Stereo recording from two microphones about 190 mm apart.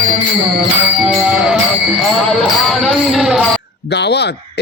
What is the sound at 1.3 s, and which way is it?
Music, 5° right (ahead or behind).